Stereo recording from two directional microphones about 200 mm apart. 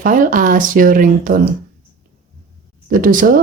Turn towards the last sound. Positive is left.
turn(degrees=-45)  # may be behind; listen again after turning